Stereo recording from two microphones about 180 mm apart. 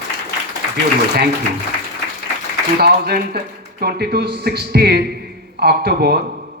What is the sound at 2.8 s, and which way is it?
A man's voice, 60° right (ahead or behind).